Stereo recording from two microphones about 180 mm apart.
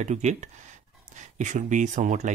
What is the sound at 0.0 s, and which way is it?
Speech, 40° right (ahead or behind).